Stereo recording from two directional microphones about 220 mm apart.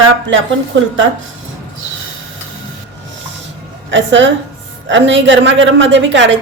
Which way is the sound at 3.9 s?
55° right (ahead or behind).